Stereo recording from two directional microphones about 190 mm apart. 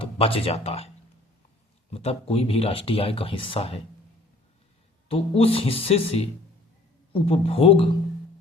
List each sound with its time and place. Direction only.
0.0 s speech: 30° left (ahead or behind)
1.9 s speech: 30° left (ahead or behind)
5.0 s speech: 30° left (ahead or behind)